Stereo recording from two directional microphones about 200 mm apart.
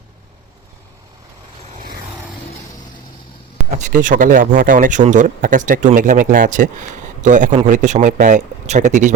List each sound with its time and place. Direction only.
1.7 s vehicle: 45° right (ahead or behind)
3.8 s speech: 40° right (ahead or behind)